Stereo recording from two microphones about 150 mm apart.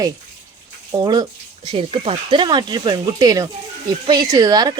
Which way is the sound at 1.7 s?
35° right (ahead or behind).